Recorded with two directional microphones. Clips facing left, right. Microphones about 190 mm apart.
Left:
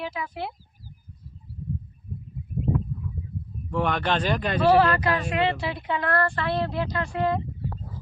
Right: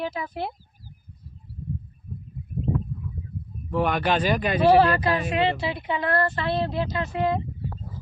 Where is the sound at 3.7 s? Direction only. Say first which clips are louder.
Right 2 dB; 5° right (ahead or behind).